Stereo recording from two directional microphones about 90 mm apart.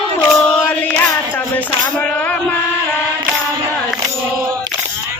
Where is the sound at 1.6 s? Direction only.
15° left (ahead or behind).